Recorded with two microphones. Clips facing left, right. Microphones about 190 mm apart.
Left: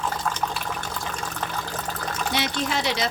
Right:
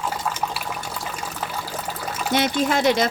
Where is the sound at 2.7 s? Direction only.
50° right (ahead or behind).